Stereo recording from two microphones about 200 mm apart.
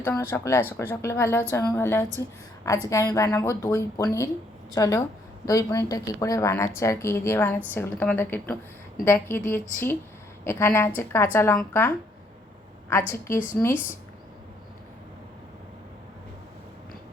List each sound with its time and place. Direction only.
0.0 s a woman's voice: 10° left (ahead or behind)